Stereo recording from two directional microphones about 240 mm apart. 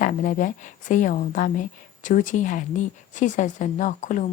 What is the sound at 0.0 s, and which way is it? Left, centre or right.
A woman's voice, left.